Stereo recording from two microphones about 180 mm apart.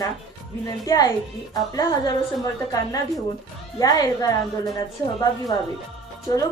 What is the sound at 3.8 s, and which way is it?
A woman's voice, 20° left (ahead or behind).